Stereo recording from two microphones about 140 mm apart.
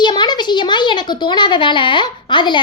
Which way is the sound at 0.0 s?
30° left (ahead or behind).